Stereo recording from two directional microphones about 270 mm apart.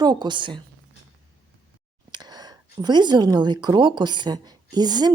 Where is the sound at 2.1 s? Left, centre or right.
Centre.